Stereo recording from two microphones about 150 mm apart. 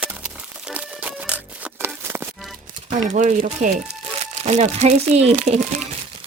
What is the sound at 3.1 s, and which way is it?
Speech, 55° right (ahead or behind).